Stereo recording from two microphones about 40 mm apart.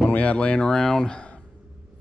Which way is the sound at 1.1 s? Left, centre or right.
Left.